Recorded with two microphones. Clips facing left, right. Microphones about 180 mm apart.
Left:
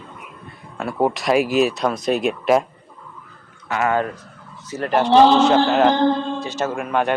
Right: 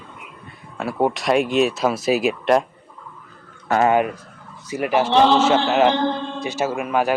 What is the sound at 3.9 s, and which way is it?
Speech, 15° right (ahead or behind).